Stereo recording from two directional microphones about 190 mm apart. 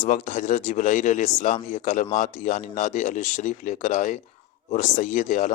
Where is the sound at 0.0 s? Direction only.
40° left (ahead or behind).